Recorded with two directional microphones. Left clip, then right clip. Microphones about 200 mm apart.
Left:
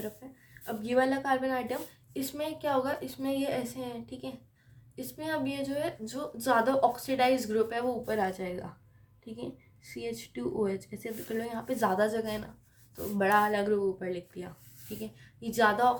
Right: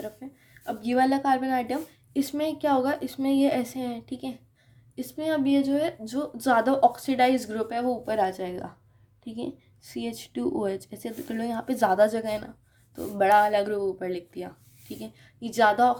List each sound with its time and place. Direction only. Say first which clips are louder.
0.6 s a woman's voice: right 4 dB; 35° right (ahead or behind)